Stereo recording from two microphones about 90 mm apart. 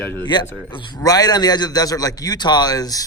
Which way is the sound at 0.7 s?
70° left (ahead or behind).